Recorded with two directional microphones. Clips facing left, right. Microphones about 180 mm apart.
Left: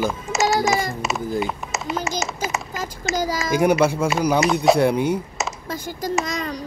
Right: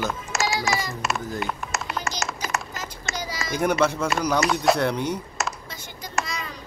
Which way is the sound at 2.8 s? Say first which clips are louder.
Left 8 dB; 45° left (ahead or behind).